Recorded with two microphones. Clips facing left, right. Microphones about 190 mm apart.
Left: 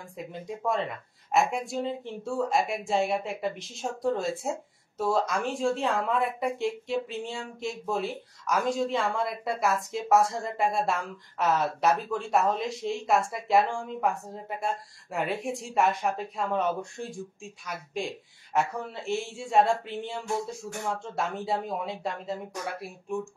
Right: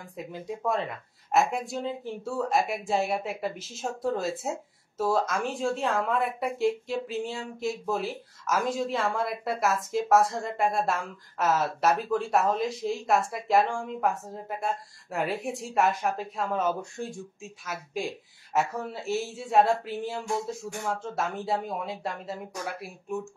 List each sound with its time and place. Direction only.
0.2 s speech: centre (ahead or behind)